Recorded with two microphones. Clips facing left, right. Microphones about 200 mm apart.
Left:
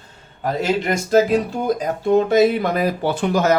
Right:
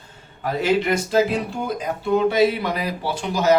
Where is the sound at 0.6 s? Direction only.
45° left (ahead or behind).